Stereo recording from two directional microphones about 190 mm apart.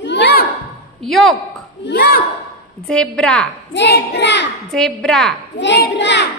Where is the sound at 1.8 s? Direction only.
55° left (ahead or behind).